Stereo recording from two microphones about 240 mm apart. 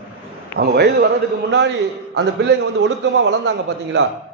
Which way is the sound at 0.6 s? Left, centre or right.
Right.